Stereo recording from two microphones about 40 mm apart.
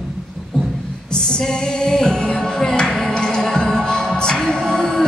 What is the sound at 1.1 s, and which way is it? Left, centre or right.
Music, left.